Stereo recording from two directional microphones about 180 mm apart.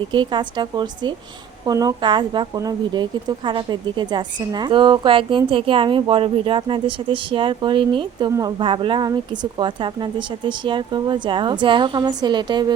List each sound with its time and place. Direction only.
0.1 s a woman's voice: 25° right (ahead or behind)